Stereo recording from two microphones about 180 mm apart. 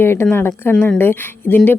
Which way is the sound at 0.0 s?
15° left (ahead or behind).